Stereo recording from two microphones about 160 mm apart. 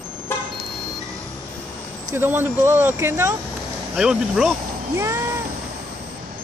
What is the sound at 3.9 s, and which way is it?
Speech, 5° right (ahead or behind).